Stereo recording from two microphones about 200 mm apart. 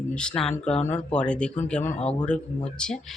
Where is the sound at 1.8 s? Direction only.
35° left (ahead or behind).